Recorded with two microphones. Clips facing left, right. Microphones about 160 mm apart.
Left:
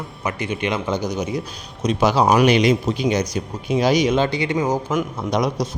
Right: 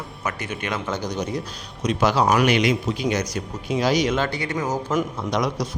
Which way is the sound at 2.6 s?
35° left (ahead or behind).